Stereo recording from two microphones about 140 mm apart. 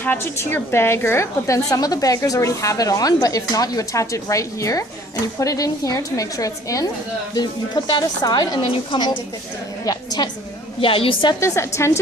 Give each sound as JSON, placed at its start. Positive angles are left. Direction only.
{"t": 0.0, "sound": "a woman's voice", "side_deg": 15}
{"t": 9.8, "sound": "a sound", "side_deg": 30}
{"t": 10.8, "sound": "a woman's voice", "side_deg": 40}
{"t": 11.3, "sound": "a woman's voice", "side_deg": 20}